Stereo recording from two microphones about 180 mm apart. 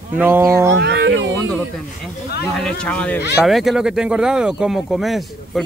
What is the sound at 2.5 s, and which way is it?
Speech, 5° left (ahead or behind).